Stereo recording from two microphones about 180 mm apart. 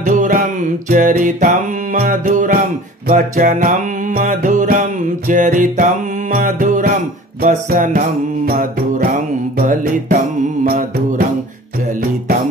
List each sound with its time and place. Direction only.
0.1 s music: 45° right (ahead or behind)